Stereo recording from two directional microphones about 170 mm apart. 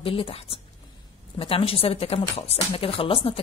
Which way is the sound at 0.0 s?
35° left (ahead or behind).